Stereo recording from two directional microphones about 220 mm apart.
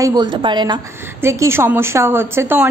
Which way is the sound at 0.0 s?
15° right (ahead or behind).